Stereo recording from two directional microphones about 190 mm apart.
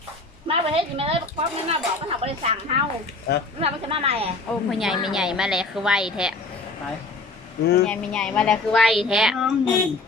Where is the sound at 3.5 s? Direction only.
30° right (ahead or behind).